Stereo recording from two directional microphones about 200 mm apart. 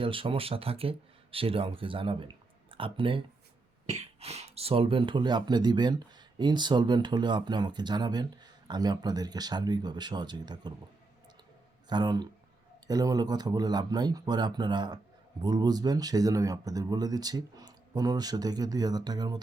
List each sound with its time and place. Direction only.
0.0 s speech: 25° right (ahead or behind)
11.9 s speech: 20° right (ahead or behind)